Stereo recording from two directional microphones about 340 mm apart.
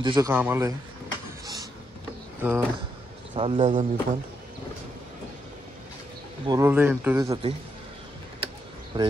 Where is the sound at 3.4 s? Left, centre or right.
Centre.